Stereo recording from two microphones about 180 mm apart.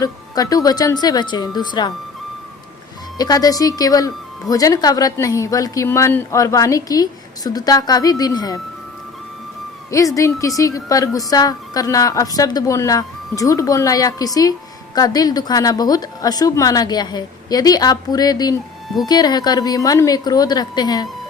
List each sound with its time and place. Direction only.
0.0 s speech: 20° left (ahead or behind)
3.2 s speech: 20° left (ahead or behind)
9.9 s speech: 20° left (ahead or behind)